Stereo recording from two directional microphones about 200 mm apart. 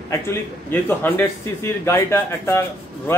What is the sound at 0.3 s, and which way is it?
A man's voice, 10° left (ahead or behind).